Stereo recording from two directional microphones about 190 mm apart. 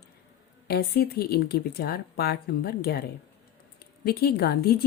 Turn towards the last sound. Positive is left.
turn(degrees=55)  # may be behind; listen again after turning